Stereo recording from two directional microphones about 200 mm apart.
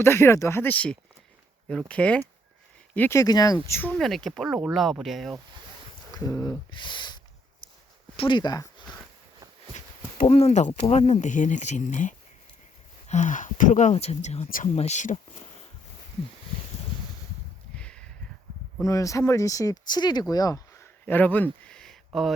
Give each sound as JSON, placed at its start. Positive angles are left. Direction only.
{"t": 0.0, "sound": "speech", "side_deg": 10}
{"t": 6.1, "sound": "speech", "side_deg": 15}
{"t": 9.7, "sound": "speech", "side_deg": 35}
{"t": 17.7, "sound": "a sound", "side_deg": 5}
{"t": 18.8, "sound": "speech", "side_deg": 15}